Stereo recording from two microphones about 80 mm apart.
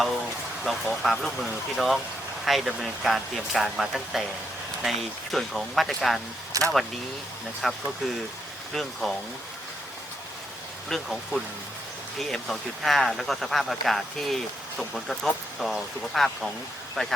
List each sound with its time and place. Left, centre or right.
0.7 s speech: centre
6.5 s speech: right
7.6 s speech: centre
10.8 s speech: centre